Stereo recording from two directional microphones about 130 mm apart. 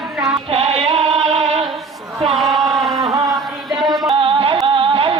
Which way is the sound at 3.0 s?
25° right (ahead or behind).